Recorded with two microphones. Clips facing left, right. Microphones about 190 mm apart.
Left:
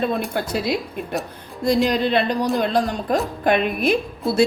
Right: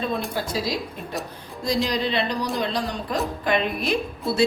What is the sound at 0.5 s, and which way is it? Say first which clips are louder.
Speech: left 5 dB; 60° left (ahead or behind).